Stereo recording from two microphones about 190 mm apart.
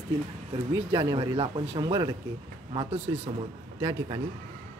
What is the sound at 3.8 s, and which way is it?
Speech, 20° right (ahead or behind).